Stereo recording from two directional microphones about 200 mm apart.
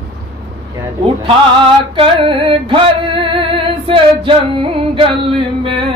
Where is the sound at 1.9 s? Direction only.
25° right (ahead or behind).